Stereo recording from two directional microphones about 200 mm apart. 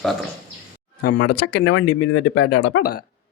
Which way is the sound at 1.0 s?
55° left (ahead or behind).